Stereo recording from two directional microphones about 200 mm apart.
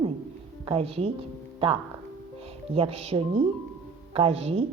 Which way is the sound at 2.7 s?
30° right (ahead or behind).